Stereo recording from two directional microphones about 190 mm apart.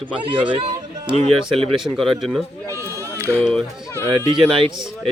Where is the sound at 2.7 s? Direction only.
15° right (ahead or behind).